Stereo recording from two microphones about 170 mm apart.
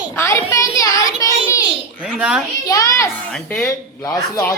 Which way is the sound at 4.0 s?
15° left (ahead or behind).